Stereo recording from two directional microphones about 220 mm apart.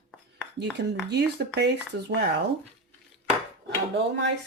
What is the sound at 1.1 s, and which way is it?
Speech, 50° right (ahead or behind).